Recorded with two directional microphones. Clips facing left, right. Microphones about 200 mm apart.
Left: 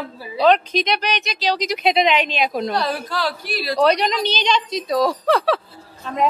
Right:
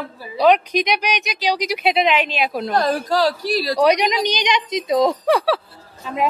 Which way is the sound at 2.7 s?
45° right (ahead or behind).